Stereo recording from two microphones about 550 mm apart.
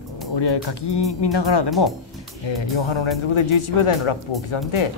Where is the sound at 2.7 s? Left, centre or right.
Left.